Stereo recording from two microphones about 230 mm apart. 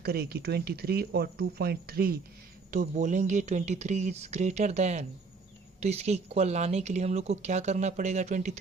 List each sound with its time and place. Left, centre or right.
0.0 s speech: right